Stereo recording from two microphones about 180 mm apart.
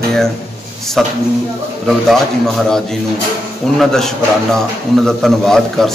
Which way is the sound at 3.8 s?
Centre (ahead or behind).